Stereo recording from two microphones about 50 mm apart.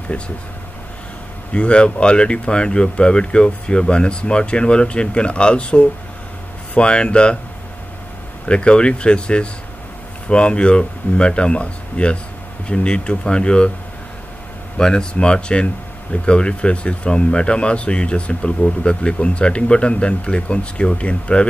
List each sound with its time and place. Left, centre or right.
0.1 s speech: left
1.5 s speech: left
8.5 s speech: left
14.8 s speech: centre